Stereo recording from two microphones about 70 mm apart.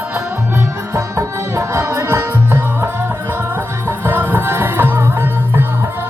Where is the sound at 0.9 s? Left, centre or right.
Right.